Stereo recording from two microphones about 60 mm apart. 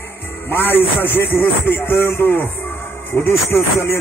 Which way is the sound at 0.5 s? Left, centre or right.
Left.